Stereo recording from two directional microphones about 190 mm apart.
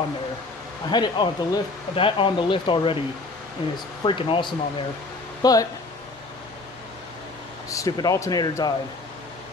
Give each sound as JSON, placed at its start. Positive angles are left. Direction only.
{"t": 0.8, "sound": "speech", "side_deg": 20}
{"t": 7.7, "sound": "speech", "side_deg": 15}